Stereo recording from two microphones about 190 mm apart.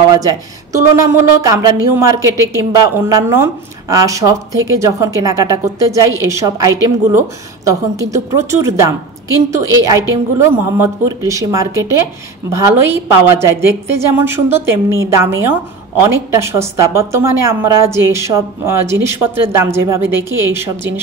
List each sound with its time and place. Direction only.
0.1 s a woman's voice: 20° right (ahead or behind)